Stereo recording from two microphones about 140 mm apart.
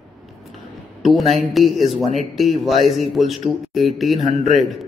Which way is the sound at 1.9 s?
50° right (ahead or behind).